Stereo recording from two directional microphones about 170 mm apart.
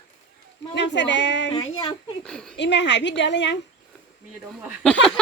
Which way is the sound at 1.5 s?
25° left (ahead or behind).